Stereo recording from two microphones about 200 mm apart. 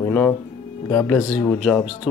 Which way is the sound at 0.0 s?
10° left (ahead or behind).